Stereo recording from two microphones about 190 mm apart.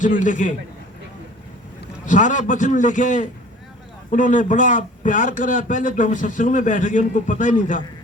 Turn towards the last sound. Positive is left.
turn(degrees=40)  # may be behind; listen again after turning